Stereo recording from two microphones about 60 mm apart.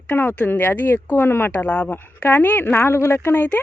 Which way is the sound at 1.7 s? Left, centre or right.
Left.